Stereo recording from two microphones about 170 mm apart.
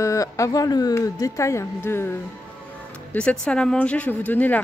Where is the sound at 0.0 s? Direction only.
20° left (ahead or behind).